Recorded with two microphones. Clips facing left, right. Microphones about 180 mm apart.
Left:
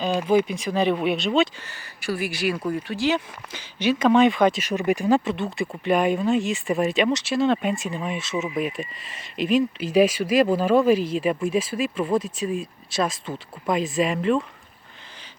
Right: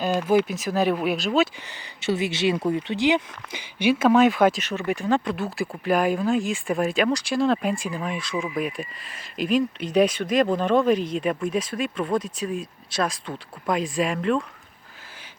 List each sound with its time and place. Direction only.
0.3 s speech: 5° right (ahead or behind)
1.6 s speech: 20° right (ahead or behind); by 4.6 s 5° right (ahead or behind)
4.6 s speech: 15° left (ahead or behind)